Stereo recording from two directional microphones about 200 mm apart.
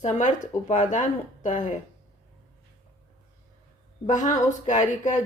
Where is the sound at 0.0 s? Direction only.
35° left (ahead or behind).